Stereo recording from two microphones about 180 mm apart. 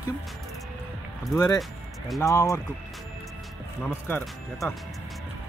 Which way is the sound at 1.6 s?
Centre (ahead or behind).